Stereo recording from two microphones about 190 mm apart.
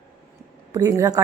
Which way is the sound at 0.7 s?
15° right (ahead or behind).